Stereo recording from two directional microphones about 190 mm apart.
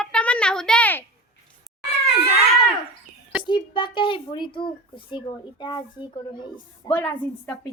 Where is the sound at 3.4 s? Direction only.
25° left (ahead or behind).